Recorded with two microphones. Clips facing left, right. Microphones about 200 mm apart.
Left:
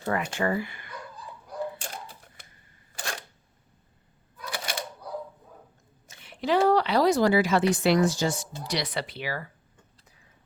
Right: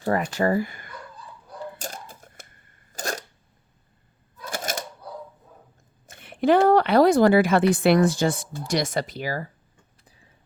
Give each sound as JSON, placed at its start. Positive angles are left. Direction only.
{"t": 0.3, "sound": "speech", "side_deg": -40}
{"t": 1.8, "sound": "typewriter", "side_deg": -45}
{"t": 2.9, "sound": "camera", "side_deg": -40}
{"t": 4.4, "sound": "coin", "side_deg": -45}
{"t": 6.1, "sound": "speech", "side_deg": -55}